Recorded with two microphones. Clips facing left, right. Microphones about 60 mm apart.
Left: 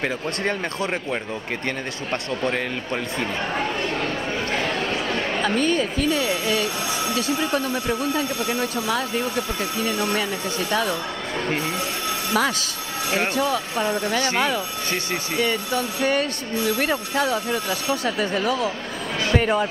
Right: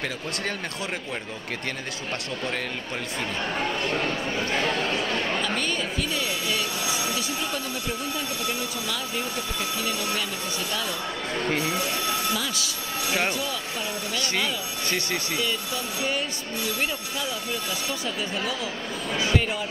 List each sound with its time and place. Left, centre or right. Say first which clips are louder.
0.0 s speech: left 5 dB; left
4.8 s speech: left 2 dB; left
5.4 s speech: left 6 dB; left
9.8 s speech: left 7 dB; left
11.3 s speech: left 1 dB; left
12.4 s speech: left 8 dB; left